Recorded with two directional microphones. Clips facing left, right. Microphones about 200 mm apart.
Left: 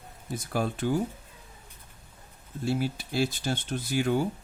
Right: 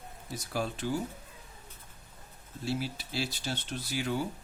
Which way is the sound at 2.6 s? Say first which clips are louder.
Left 5 dB; 50° left (ahead or behind).